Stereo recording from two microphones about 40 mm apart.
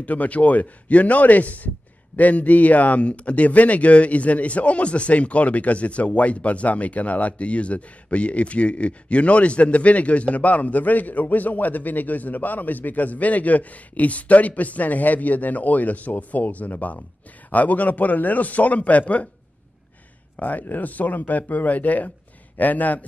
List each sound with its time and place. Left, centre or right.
0.0 s speech: left
20.3 s speech: left